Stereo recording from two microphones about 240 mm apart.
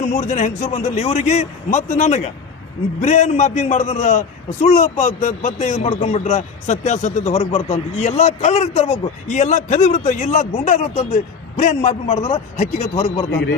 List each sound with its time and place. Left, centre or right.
0.0 s a man's voice: left
13.3 s speech: left